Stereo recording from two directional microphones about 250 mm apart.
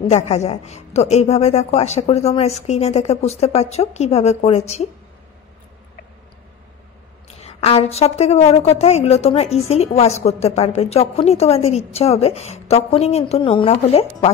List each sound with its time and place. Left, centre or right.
0.0 s a woman's voice: left
7.2 s a woman's voice: left